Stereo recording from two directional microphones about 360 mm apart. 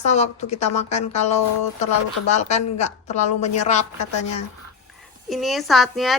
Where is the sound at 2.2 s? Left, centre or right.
Centre.